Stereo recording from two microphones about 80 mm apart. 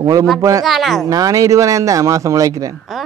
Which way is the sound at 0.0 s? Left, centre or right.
Right.